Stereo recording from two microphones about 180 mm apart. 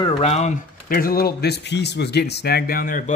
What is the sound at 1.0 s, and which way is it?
Speech, 55° left (ahead or behind).